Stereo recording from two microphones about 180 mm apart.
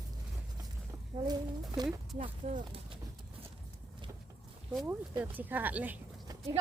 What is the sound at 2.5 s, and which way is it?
Speech, 40° right (ahead or behind).